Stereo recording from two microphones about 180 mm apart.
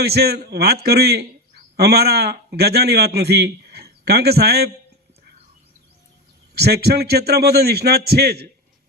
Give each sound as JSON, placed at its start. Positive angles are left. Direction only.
{"t": 0.0, "sound": "a man's voice", "side_deg": -60}
{"t": 6.5, "sound": "a man's voice", "side_deg": -60}